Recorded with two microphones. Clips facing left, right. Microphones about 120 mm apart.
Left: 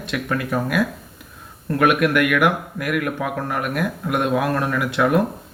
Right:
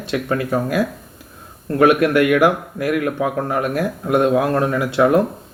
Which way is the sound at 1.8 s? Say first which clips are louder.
Right 4 dB; 35° right (ahead or behind).